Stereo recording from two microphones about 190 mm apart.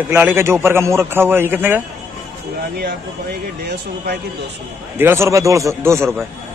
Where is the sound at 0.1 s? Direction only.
10° right (ahead or behind).